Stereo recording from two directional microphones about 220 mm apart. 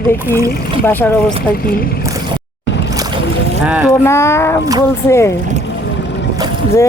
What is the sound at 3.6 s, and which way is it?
Speech, 5° right (ahead or behind).